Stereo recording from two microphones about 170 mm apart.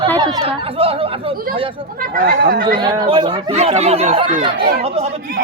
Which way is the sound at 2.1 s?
60° right (ahead or behind).